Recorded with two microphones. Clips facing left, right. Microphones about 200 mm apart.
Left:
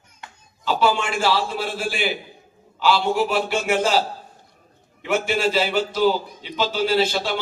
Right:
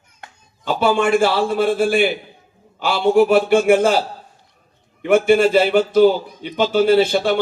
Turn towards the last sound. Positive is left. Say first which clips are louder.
# right 6 dB
turn(degrees=-55)  # may be behind; listen again after turning